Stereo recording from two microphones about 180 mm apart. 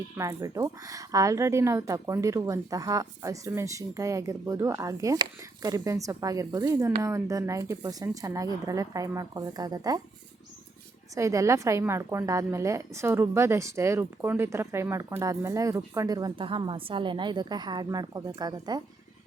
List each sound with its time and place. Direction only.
0.2 s a woman's voice: 20° right (ahead or behind)
11.1 s a woman's voice: 15° right (ahead or behind)